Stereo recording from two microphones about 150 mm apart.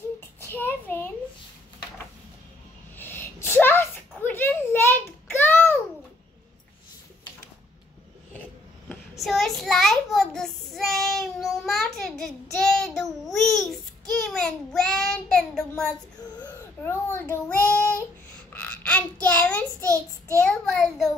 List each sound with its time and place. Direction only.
0.2 s a sound: 15° left (ahead or behind)
3.0 s a sound: 15° left (ahead or behind)
9.2 s child singing: centre (ahead or behind)
16.8 s child singing: 15° left (ahead or behind)
19.8 s child singing: 20° right (ahead or behind)
20.4 s child singing: centre (ahead or behind)